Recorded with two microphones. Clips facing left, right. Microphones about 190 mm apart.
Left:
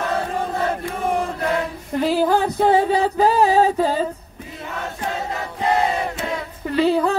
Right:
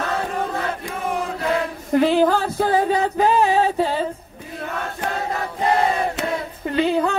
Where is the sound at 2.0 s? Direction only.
10° left (ahead or behind); by 4.0 s 40° left (ahead or behind).